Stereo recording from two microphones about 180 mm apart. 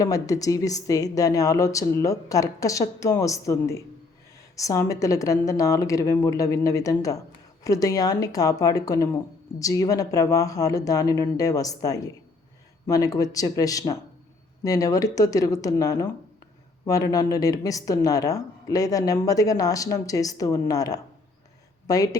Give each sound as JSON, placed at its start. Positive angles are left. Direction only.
{"t": 0.0, "sound": "a woman's voice", "side_deg": 20}